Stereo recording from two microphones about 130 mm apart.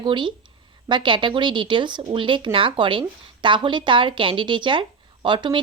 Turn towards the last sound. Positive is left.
turn(degrees=-35)  # may be behind; listen again after turning